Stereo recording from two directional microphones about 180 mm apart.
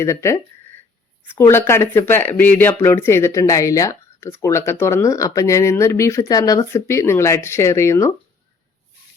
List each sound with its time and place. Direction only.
0.0 s speech: 15° left (ahead or behind)
1.4 s speech: 15° left (ahead or behind)